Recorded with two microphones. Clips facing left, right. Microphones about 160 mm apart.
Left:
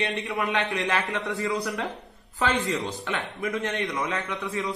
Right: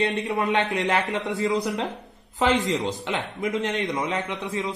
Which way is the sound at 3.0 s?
20° right (ahead or behind).